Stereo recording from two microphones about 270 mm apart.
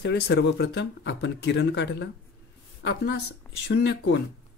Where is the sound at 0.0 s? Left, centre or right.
Left.